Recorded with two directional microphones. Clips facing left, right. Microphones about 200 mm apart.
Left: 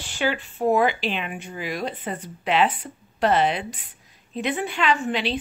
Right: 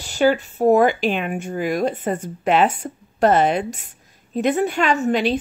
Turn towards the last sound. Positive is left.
turn(degrees=-45)  # may be behind; listen again after turning